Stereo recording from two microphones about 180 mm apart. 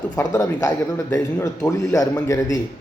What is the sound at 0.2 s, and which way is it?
A man's voice, 20° left (ahead or behind).